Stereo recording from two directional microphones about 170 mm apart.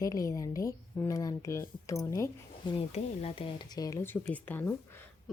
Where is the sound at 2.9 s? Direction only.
35° left (ahead or behind).